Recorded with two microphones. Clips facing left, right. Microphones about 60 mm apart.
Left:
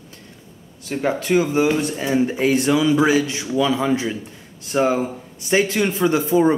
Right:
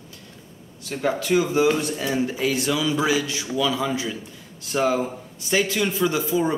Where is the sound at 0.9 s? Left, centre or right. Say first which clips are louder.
Left 3 dB; left.